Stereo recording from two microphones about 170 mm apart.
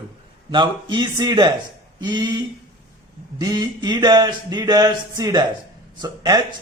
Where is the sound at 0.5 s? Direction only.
25° right (ahead or behind).